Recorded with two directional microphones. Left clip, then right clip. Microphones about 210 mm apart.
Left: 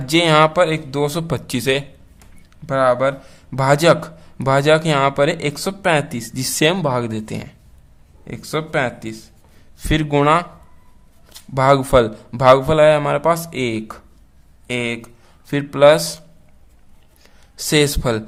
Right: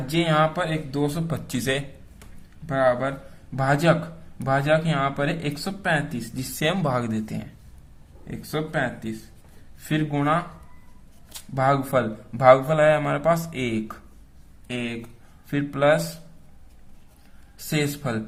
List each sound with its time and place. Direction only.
0.1 s speech: 40° left (ahead or behind)
1.5 s a man's voice: 25° left (ahead or behind)
2.6 s speech: 35° left (ahead or behind)
8.3 s speech: 40° left (ahead or behind)
9.9 s speech: 40° left (ahead or behind)
11.5 s a man's voice: 35° left (ahead or behind)
17.7 s speech: 35° left (ahead or behind)